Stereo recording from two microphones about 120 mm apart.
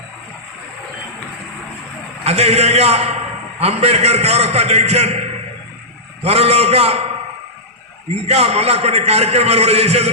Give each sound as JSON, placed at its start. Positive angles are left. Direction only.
{"t": 2.2, "sound": "a man's voice", "side_deg": -65}
{"t": 6.2, "sound": "a man's voice", "side_deg": -60}
{"t": 8.1, "sound": "a man's voice", "side_deg": -60}